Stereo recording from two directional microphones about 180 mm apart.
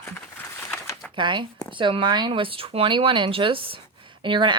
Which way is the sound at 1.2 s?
25° right (ahead or behind).